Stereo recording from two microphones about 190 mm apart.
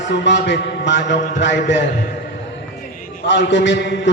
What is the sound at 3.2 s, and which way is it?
Speech, 70° left (ahead or behind).